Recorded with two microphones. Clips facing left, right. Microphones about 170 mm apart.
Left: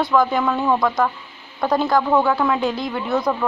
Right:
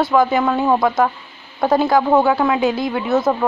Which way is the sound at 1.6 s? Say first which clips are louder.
Right 3 dB; 5° right (ahead or behind).